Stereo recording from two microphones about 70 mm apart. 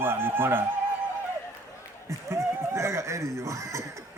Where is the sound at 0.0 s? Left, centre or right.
Right.